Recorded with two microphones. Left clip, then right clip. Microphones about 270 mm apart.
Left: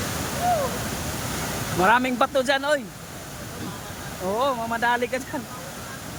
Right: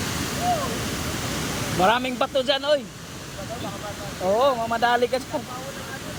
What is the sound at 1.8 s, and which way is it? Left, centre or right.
Speech, centre.